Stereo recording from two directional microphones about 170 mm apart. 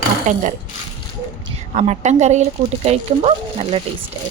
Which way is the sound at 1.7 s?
40° right (ahead or behind).